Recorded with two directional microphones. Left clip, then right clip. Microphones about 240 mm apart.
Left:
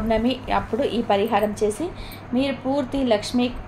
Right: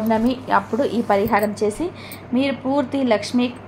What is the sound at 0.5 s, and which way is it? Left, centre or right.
A woman's voice, right.